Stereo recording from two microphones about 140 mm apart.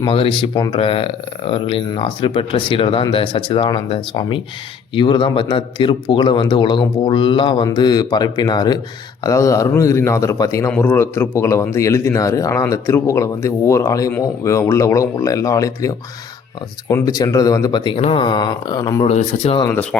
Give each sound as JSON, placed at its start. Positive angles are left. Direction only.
{"t": 0.1, "sound": "a man's voice", "side_deg": 40}
{"t": 17.9, "sound": "a man's voice", "side_deg": 45}
{"t": 19.0, "sound": "speech", "side_deg": 50}
{"t": 19.6, "sound": "speech", "side_deg": 10}